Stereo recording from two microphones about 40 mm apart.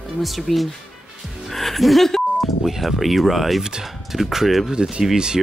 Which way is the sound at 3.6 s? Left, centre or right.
Centre.